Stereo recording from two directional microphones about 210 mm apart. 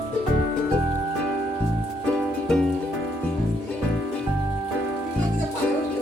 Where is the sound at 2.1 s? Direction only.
5° left (ahead or behind).